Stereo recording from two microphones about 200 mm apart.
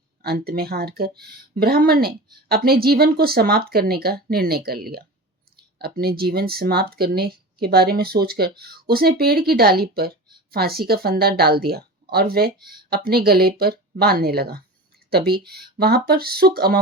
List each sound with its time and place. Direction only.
0.2 s speech: 50° right (ahead or behind)